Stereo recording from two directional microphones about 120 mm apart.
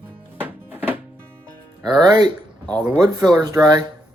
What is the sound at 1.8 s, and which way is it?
Speech, 35° right (ahead or behind).